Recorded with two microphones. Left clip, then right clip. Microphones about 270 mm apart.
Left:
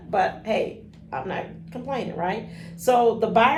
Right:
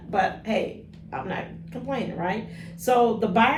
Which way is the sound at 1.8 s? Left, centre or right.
Centre.